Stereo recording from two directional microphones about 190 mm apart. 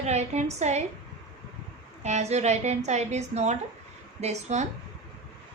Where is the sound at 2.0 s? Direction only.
35° right (ahead or behind).